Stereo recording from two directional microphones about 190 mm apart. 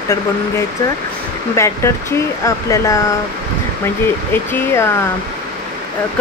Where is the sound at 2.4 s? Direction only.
15° left (ahead or behind).